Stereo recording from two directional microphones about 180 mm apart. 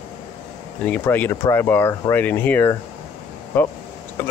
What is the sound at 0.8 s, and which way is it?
Speech, 10° left (ahead or behind).